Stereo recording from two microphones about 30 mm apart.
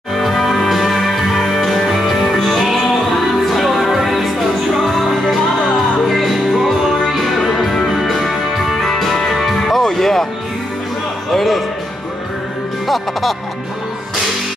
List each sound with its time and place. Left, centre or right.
0.1 s music: centre
8.8 s music: centre
11.3 s music: centre
12.8 s music: centre